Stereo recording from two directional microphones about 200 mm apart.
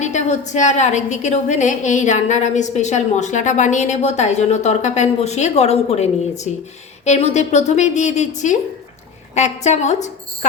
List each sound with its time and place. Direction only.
0.0 s a woman's voice: 35° left (ahead or behind)